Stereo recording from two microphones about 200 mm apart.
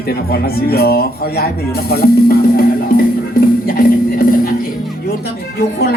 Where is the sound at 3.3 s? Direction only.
50° left (ahead or behind).